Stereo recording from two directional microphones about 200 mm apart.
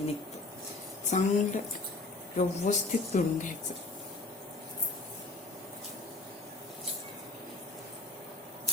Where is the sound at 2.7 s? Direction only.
40° left (ahead or behind).